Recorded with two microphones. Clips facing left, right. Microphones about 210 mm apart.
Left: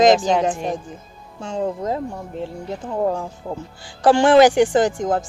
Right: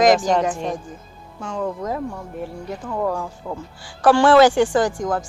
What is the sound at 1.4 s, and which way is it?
A woman's voice, 25° left (ahead or behind).